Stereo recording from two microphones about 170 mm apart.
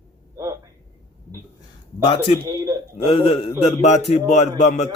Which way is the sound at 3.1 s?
30° left (ahead or behind).